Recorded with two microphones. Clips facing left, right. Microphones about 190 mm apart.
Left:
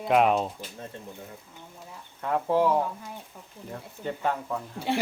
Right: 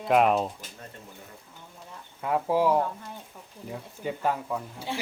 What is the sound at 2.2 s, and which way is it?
Speech, 5° right (ahead or behind).